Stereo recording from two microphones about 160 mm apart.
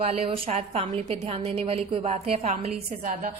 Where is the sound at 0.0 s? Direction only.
40° right (ahead or behind).